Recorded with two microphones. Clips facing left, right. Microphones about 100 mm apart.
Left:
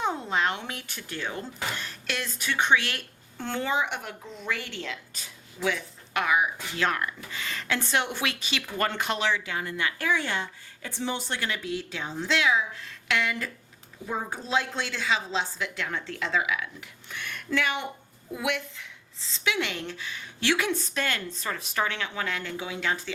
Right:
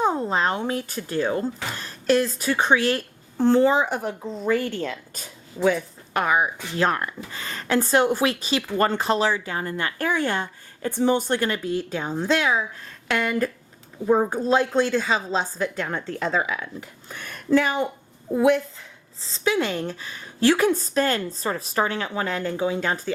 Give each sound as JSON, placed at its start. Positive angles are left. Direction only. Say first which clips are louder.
{"t": 0.0, "sound": "a woman's voice", "louder": "right 5 dB", "side_deg": -40}